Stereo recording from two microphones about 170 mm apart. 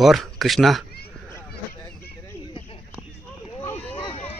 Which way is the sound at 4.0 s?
35° left (ahead or behind).